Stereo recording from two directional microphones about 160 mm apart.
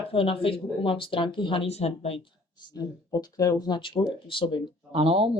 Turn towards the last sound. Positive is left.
turn(degrees=-35)  # may be behind; listen again after turning